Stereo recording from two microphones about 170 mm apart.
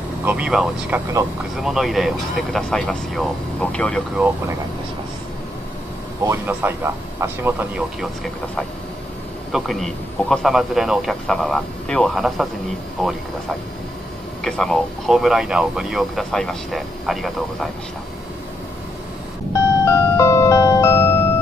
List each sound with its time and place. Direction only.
0.2 s speech: 10° right (ahead or behind)
6.2 s speech: 10° right (ahead or behind)
8.0 s speech: centre (ahead or behind)
14.4 s speech: centre (ahead or behind)
19.8 s music: 15° left (ahead or behind)